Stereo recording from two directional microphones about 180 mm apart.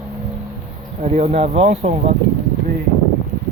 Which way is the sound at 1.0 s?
40° right (ahead or behind).